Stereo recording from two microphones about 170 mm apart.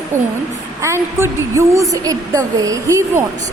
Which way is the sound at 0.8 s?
15° right (ahead or behind).